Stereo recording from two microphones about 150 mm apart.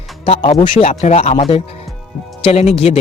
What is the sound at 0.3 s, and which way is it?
Speech, 40° left (ahead or behind).